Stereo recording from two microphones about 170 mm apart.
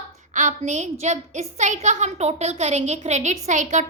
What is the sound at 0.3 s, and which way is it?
A woman's voice, 45° right (ahead or behind).